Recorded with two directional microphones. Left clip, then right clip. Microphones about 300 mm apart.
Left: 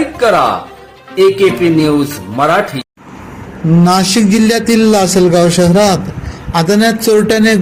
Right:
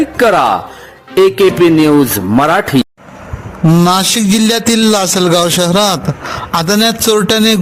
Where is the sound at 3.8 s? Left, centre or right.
Right.